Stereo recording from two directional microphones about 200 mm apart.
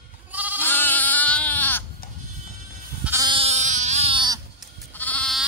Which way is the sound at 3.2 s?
25° right (ahead or behind).